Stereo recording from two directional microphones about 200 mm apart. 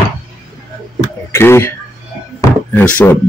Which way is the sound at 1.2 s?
15° left (ahead or behind).